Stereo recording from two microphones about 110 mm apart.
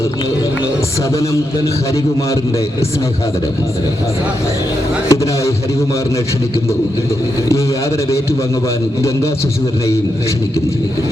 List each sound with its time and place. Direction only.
1.1 s a man's voice: 25° left (ahead or behind)
5.0 s speech: 25° left (ahead or behind)
9.0 s a man's voice: 25° left (ahead or behind)